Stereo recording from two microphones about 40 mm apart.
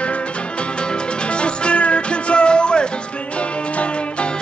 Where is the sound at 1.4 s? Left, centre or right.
Left.